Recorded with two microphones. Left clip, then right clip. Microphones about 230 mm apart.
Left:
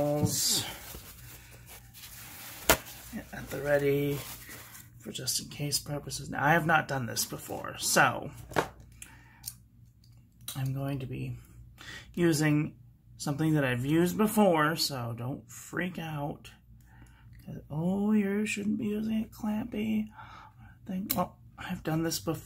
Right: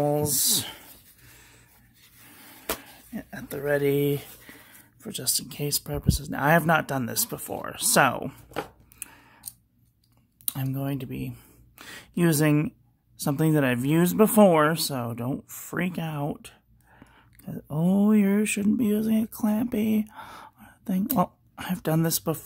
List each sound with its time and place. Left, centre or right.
0.0 s speech: right
3.2 s speech: right
9.0 s a sound: right
10.4 s speech: right